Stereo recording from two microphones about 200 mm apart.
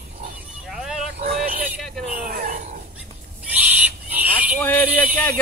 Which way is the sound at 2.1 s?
45° right (ahead or behind).